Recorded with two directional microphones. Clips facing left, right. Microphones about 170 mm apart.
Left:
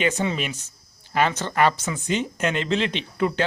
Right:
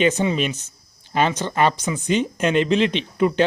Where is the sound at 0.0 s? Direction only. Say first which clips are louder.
Right 5 dB; 20° right (ahead or behind).